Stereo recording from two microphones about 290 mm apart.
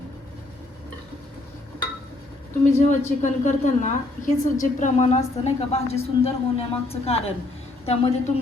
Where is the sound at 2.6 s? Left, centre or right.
Left.